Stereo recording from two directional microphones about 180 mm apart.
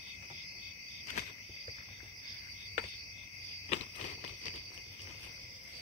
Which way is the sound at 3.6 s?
45° left (ahead or behind).